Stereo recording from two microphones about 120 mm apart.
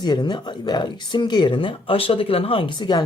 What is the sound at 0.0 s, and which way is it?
Speech, 40° left (ahead or behind).